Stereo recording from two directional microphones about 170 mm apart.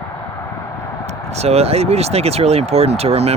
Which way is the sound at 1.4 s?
40° right (ahead or behind).